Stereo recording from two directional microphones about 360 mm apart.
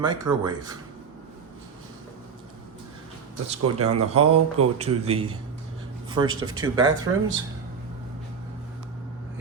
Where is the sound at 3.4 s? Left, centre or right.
Centre.